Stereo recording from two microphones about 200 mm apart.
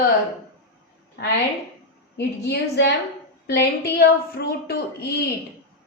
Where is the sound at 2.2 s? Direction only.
55° left (ahead or behind).